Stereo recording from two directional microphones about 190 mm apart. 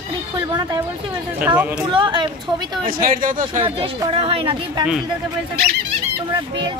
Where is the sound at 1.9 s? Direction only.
25° right (ahead or behind).